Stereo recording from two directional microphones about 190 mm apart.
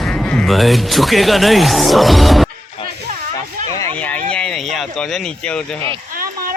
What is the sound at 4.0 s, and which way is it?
Speech, 5° left (ahead or behind).